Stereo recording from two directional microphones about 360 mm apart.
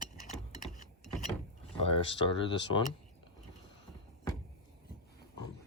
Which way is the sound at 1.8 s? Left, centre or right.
Centre.